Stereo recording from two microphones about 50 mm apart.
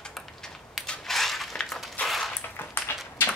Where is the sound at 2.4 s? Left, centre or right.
Left.